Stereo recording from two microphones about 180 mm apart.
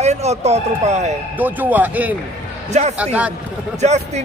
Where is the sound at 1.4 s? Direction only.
10° right (ahead or behind).